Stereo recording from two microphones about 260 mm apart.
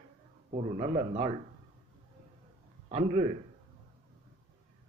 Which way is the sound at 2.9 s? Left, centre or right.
Right.